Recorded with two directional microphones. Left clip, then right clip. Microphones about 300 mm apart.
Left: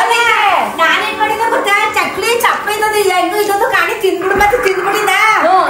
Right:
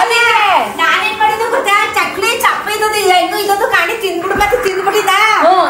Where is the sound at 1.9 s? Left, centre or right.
Centre.